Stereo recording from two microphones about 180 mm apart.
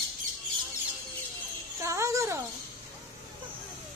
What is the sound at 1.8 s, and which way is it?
Music, 15° right (ahead or behind).